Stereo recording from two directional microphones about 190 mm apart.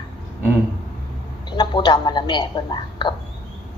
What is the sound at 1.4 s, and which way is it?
Speech, 25° left (ahead or behind).